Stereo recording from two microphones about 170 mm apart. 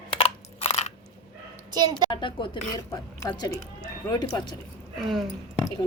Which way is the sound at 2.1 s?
30° left (ahead or behind).